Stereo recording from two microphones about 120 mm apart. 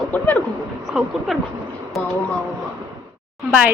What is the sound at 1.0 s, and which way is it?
Speech, 5° right (ahead or behind).